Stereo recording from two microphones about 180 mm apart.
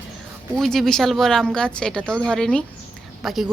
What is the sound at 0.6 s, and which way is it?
A woman's voice, centre (ahead or behind).